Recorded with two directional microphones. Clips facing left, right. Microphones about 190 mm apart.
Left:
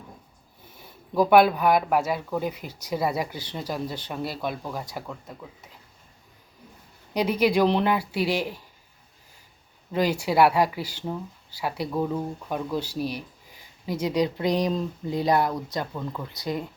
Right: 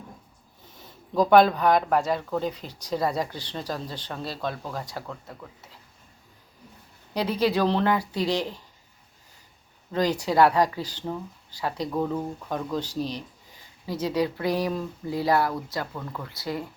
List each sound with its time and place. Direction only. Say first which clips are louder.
1.1 s speech: even; 10° left (ahead or behind)
7.1 s speech: left 2 dB; 15° left (ahead or behind)
9.9 s speech: even; 10° left (ahead or behind)